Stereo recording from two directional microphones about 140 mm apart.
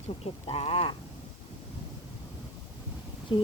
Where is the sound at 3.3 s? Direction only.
35° left (ahead or behind).